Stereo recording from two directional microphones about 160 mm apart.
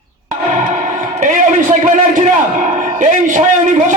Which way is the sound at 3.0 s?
50° right (ahead or behind).